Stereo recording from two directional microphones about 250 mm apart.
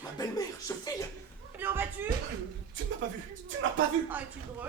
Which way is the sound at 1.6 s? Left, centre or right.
Centre.